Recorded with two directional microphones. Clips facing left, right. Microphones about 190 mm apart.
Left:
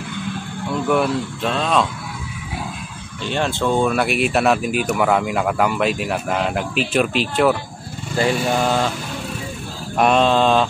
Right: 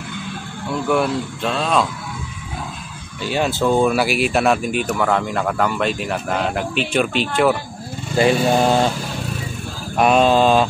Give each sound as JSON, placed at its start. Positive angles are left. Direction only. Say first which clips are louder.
{"t": 0.8, "sound": "speech", "louder": "even", "side_deg": 0}
{"t": 3.3, "sound": "speech", "louder": "right 2 dB", "side_deg": -5}
{"t": 8.2, "sound": "speech", "louder": "right 3 dB", "side_deg": -20}
{"t": 9.9, "sound": "mantra", "louder": "right 1 dB", "side_deg": -5}